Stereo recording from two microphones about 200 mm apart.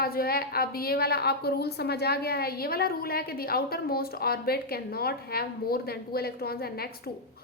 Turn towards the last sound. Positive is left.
turn(degrees=50)  # may be behind; listen again after turning